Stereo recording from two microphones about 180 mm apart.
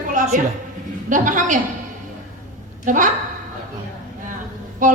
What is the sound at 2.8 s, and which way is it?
Speech, 45° right (ahead or behind).